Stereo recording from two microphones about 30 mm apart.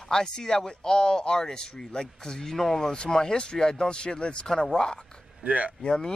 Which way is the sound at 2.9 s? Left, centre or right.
Left.